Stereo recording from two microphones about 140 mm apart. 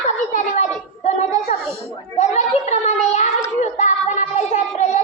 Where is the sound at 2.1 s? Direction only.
55° left (ahead or behind).